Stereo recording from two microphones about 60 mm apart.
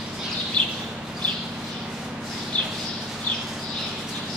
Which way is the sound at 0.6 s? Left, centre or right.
Centre.